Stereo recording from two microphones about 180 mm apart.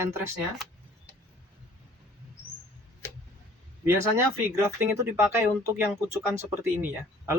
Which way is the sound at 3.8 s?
15° right (ahead or behind).